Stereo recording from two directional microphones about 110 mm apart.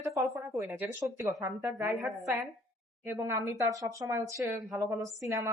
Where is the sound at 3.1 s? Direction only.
25° right (ahead or behind).